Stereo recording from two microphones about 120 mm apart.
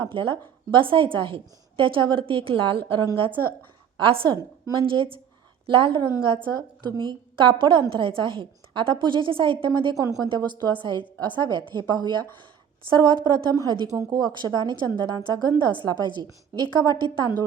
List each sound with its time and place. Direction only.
0.0 s a woman's voice: 45° right (ahead or behind)
10.0 s a woman's voice: 30° right (ahead or behind)